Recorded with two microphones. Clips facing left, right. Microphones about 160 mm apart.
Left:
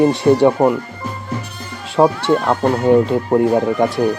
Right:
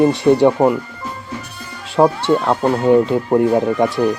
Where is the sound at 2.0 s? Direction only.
5° left (ahead or behind).